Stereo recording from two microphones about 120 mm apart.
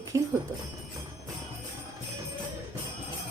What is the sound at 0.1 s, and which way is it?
Jingle bell, 25° right (ahead or behind).